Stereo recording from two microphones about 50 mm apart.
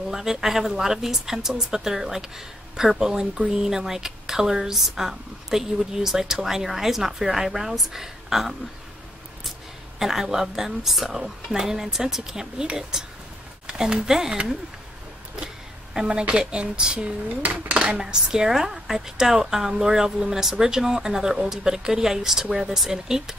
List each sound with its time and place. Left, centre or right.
0.1 s speech: centre
9.9 s a woman's voice: centre